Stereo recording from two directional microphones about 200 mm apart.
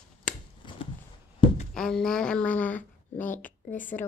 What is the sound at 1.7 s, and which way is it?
A woman's voice, 5° left (ahead or behind).